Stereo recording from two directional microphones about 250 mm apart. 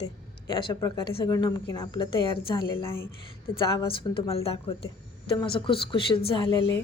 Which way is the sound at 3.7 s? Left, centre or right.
Left.